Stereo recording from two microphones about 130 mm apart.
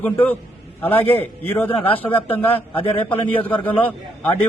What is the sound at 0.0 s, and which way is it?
A man's voice, 10° left (ahead or behind).